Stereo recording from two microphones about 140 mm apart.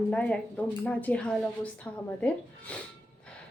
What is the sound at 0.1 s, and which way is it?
A woman's voice, 10° left (ahead or behind).